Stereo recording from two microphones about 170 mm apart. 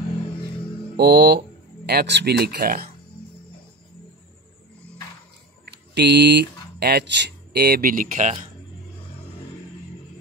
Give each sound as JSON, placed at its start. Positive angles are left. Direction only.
{"t": 0.9, "sound": "speech", "side_deg": -70}
{"t": 5.7, "sound": "speech", "side_deg": -80}